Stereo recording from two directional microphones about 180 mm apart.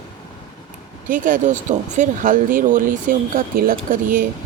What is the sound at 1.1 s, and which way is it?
Speech, 50° right (ahead or behind).